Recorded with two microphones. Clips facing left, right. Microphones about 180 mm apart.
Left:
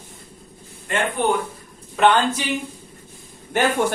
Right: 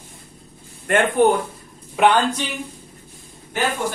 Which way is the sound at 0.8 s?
55° right (ahead or behind).